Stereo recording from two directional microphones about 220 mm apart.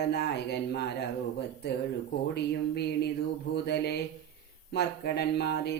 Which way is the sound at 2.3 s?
50° left (ahead or behind).